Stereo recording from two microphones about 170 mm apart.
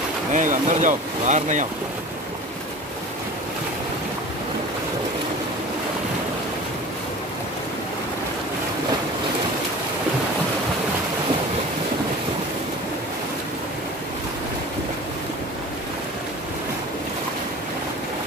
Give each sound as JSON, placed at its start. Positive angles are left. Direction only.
{"t": 0.3, "sound": "speech", "side_deg": -45}